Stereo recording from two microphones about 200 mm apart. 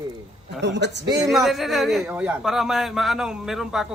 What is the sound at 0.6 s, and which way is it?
Speech, 60° right (ahead or behind).